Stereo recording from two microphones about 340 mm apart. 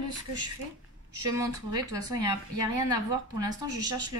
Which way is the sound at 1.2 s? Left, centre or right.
Centre.